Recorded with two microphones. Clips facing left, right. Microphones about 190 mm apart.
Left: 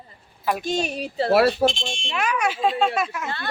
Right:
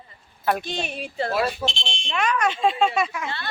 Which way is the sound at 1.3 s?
70° left (ahead or behind).